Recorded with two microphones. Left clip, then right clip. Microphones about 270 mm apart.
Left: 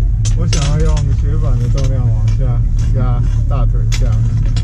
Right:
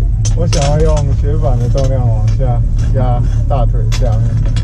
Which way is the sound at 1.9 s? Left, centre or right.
Centre.